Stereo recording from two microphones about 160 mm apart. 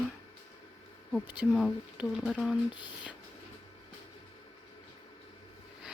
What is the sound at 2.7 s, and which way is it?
Speech, 30° left (ahead or behind).